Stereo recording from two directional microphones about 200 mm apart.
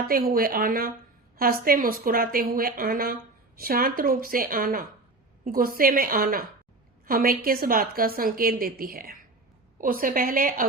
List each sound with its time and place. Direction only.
0.1 s a woman's voice: 50° right (ahead or behind)